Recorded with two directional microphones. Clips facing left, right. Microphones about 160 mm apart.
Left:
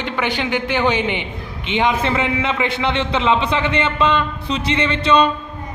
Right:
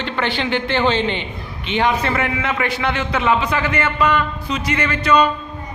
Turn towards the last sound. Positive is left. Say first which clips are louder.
# left 1 dB
turn(degrees=25)  # may be behind; listen again after turning